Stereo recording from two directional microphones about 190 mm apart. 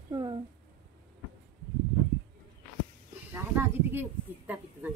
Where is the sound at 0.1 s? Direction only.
25° right (ahead or behind).